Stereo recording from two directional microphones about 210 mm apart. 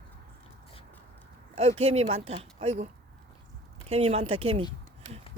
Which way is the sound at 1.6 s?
30° right (ahead or behind).